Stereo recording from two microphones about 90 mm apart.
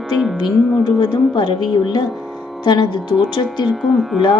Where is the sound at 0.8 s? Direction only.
60° left (ahead or behind).